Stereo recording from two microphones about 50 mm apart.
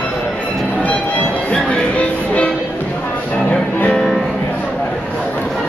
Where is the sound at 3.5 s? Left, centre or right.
Left.